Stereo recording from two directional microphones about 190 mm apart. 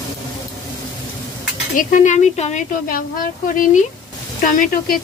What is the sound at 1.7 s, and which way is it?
A woman's voice, 40° left (ahead or behind).